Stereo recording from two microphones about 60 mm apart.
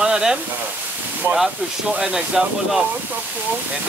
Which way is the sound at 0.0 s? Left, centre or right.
Centre.